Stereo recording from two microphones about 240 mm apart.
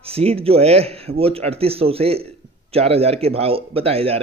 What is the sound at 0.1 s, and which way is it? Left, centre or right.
A man's voice, right.